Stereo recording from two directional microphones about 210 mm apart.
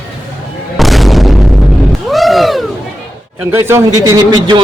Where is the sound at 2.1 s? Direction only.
Centre (ahead or behind).